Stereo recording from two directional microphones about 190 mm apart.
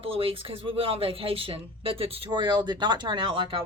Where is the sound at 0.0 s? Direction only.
30° right (ahead or behind).